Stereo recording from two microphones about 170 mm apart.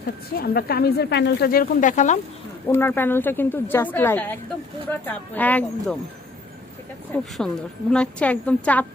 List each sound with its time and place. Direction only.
0.3 s a woman's voice: 65° left (ahead or behind); by 2.1 s 45° left (ahead or behind)
2.6 s a woman's voice: 10° left (ahead or behind)
7.1 s a woman's voice: 5° left (ahead or behind)